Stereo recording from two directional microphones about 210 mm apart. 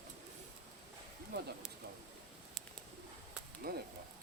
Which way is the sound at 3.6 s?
45° right (ahead or behind).